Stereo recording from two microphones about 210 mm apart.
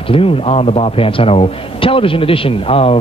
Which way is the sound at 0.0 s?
25° left (ahead or behind).